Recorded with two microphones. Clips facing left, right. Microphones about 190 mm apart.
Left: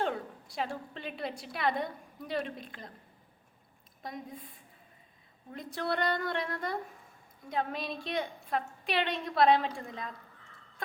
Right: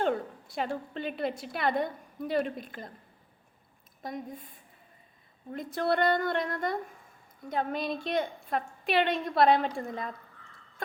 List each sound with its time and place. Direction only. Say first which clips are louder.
0.0 s a woman's voice: right 4 dB; centre (ahead or behind)
4.0 s a woman's voice: right 4 dB; centre (ahead or behind)
9.9 s speech: right 5 dB; 50° right (ahead or behind)